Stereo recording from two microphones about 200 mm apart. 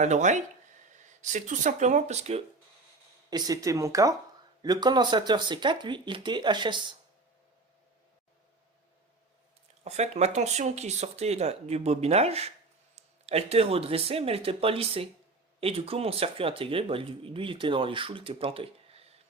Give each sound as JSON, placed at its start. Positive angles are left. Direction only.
{"t": 0.0, "sound": "speech", "side_deg": -35}
{"t": 3.2, "sound": "speech", "side_deg": -20}
{"t": 9.8, "sound": "speech", "side_deg": -35}